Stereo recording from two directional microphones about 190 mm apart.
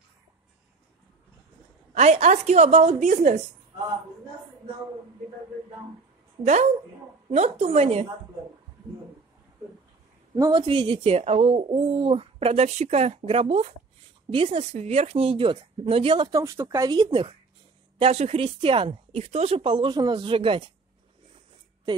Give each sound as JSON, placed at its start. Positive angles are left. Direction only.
{"t": 2.0, "sound": "speech", "side_deg": -35}
{"t": 6.4, "sound": "speech", "side_deg": -40}
{"t": 10.3, "sound": "a woman's voice", "side_deg": -20}